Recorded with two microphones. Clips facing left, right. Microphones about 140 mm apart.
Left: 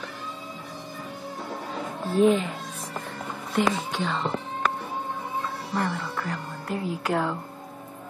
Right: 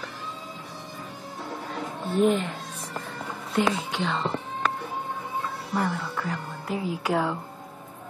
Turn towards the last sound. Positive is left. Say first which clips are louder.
# even
turn(degrees=0)  # may be behind; listen again after turning